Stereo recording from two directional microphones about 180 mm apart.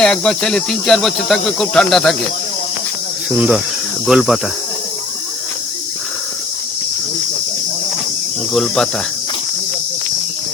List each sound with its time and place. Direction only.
0.0 s speech: 5° left (ahead or behind)
3.2 s speech: 5° right (ahead or behind)
8.5 s speech: centre (ahead or behind)